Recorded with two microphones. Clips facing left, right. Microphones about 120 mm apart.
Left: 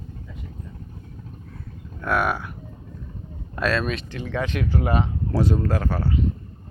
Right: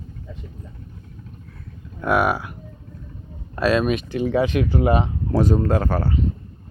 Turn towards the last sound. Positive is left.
turn(degrees=-45)  # may be behind; listen again after turning